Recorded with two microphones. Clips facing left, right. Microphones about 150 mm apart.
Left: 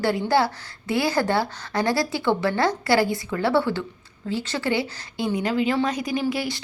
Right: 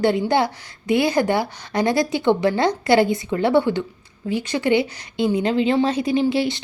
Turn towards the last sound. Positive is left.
turn(degrees=-25)  # may be behind; listen again after turning